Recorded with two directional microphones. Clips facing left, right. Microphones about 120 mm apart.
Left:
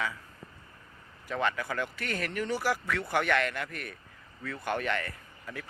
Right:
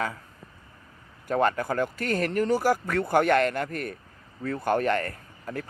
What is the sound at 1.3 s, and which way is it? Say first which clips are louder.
Speech: right 7 dB; 45° right (ahead or behind).